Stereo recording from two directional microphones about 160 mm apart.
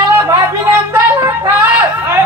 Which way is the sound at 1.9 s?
15° right (ahead or behind).